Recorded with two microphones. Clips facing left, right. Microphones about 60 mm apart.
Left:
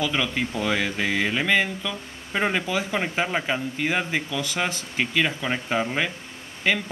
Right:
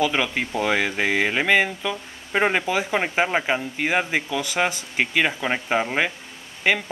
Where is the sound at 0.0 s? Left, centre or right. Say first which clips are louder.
Right 3 dB; centre.